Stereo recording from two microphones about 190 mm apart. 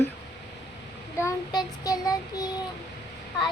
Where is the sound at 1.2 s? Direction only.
20° left (ahead or behind).